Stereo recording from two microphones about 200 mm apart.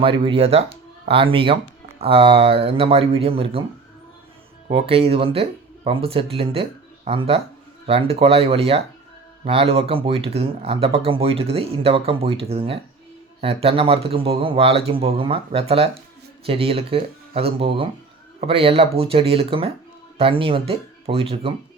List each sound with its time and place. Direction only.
0.0 s speech: 25° right (ahead or behind)
4.7 s speech: 30° right (ahead or behind)